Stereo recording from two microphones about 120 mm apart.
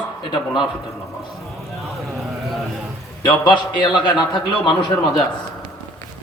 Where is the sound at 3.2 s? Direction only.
35° left (ahead or behind).